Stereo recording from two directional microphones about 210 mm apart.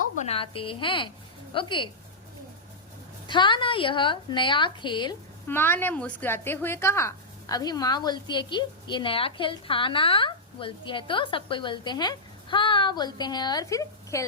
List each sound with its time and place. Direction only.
0.2 s a woman's voice: 25° left (ahead or behind)
3.2 s a woman's voice: 20° left (ahead or behind)
5.5 s a woman's voice: 10° left (ahead or behind)